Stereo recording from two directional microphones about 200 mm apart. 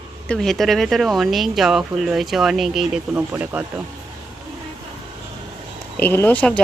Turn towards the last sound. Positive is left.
turn(degrees=5)  # may be behind; listen again after turning